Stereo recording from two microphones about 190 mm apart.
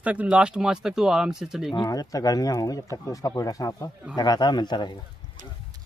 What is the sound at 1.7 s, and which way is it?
Speech, 20° left (ahead or behind).